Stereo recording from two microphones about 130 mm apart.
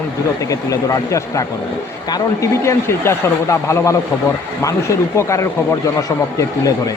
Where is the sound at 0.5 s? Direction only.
25° left (ahead or behind).